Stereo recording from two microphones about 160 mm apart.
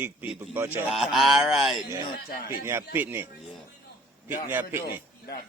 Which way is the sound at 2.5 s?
15° right (ahead or behind).